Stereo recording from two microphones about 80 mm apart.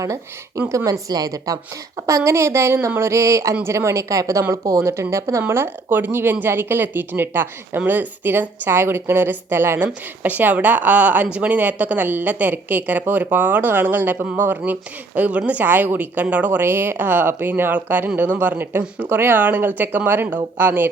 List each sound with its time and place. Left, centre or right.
0.0 s a woman's voice: right
2.0 s a woman's voice: right